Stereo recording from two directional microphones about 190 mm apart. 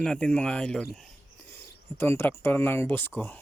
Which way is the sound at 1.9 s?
10° left (ahead or behind).